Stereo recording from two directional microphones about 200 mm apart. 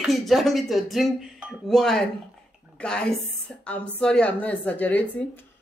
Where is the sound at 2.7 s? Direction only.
5° left (ahead or behind).